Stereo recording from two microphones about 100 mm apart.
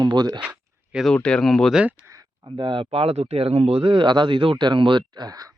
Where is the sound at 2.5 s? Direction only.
55° right (ahead or behind); by 5.5 s 40° right (ahead or behind).